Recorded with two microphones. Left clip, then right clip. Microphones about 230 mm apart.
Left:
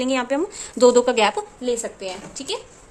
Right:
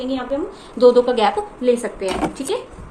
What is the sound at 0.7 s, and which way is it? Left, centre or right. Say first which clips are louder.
Speech: right 2 dB; left.